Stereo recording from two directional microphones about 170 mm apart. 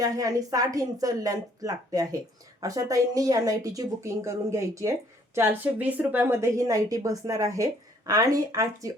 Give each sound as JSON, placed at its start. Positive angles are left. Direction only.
{"t": 0.0, "sound": "speech", "side_deg": -20}